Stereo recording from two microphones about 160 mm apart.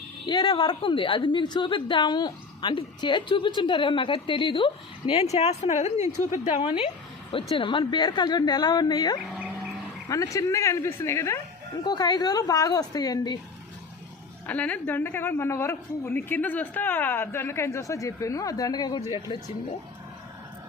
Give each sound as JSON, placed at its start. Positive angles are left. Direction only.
{"t": 0.3, "sound": "a woman's voice", "side_deg": 25}
{"t": 6.6, "sound": "a woman's voice", "side_deg": 35}
{"t": 9.3, "sound": "livestock", "side_deg": -5}
{"t": 10.1, "sound": "a woman's voice", "side_deg": 20}
{"t": 14.4, "sound": "a woman's voice", "side_deg": 10}